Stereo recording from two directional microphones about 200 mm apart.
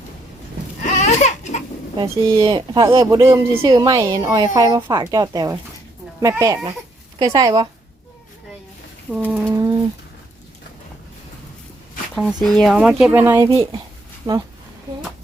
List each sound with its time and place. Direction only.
0.9 s a sound: 35° left (ahead or behind)
2.0 s speech: 25° right (ahead or behind)
9.5 s speech: 15° right (ahead or behind)
12.1 s speech: centre (ahead or behind); by 14.4 s 20° right (ahead or behind)